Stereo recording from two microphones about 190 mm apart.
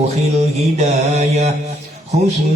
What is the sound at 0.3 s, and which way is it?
Mantra, 35° right (ahead or behind).